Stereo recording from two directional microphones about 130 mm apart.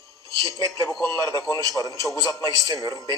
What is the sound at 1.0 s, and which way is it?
A man's voice, 20° left (ahead or behind).